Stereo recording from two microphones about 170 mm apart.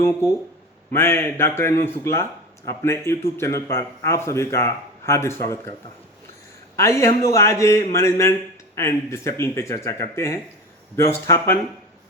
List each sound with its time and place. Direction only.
0.9 s a man's voice: 15° left (ahead or behind)
6.7 s a man's voice: 15° left (ahead or behind)